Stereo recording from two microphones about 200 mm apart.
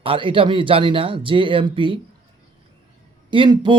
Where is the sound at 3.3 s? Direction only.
25° right (ahead or behind).